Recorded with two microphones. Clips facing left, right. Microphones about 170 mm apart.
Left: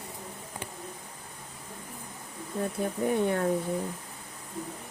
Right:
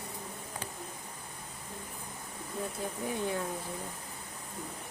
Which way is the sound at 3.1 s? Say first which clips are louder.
Left 7 dB; 60° left (ahead or behind).